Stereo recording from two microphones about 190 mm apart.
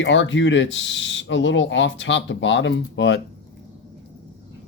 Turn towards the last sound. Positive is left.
turn(degrees=65)  # may be behind; listen again after turning